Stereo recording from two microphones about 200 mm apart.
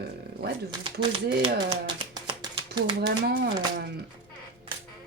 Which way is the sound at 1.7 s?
25° right (ahead or behind).